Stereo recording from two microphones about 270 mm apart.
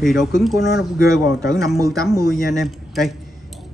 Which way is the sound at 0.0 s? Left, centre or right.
Centre.